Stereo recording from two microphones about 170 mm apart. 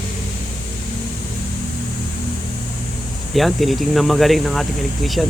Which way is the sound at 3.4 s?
Centre (ahead or behind).